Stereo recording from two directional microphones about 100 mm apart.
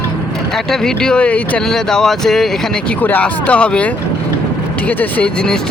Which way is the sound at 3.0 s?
15° left (ahead or behind).